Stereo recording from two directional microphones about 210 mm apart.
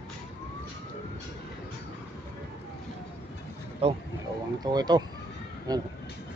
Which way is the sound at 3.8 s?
30° right (ahead or behind).